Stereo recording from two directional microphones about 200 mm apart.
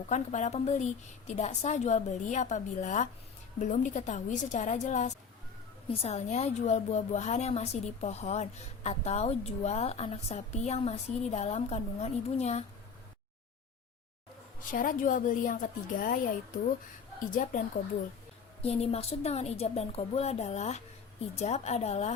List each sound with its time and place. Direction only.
0.1 s a woman's voice: 35° left (ahead or behind)
14.7 s a woman's voice: 40° left (ahead or behind)
18.6 s a woman's voice: 30° left (ahead or behind)